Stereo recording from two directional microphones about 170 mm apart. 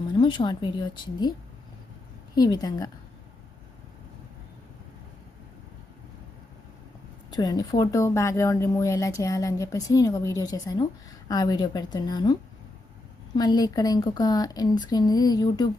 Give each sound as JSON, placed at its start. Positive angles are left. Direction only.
{"t": 0.2, "sound": "speech", "side_deg": 30}
{"t": 2.3, "sound": "a woman's voice", "side_deg": 25}
{"t": 7.3, "sound": "speech", "side_deg": 25}